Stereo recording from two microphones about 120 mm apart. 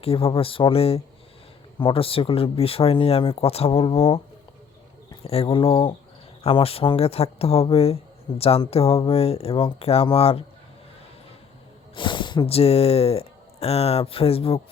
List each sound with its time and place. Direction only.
0.0 s speech: 50° left (ahead or behind)
5.2 s speech: 55° left (ahead or behind)
11.9 s a sound: 40° left (ahead or behind)
12.5 s speech: 55° left (ahead or behind)